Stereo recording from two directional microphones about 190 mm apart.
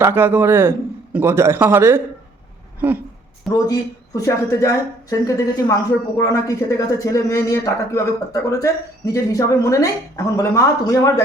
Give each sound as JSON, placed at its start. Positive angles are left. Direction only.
{"t": 0.0, "sound": "a man's voice", "side_deg": -10}
{"t": 3.5, "sound": "speech", "side_deg": 20}